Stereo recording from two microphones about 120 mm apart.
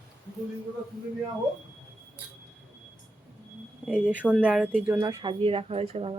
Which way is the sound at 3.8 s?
5° right (ahead or behind).